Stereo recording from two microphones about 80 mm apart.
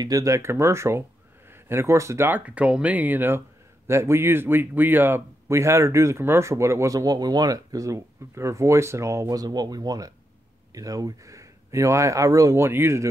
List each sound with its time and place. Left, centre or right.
0.0 s speech: right
2.2 s speech: right
5.5 s speech: right
9.4 s speech: right